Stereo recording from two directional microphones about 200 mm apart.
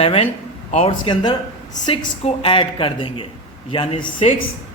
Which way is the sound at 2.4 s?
25° left (ahead or behind).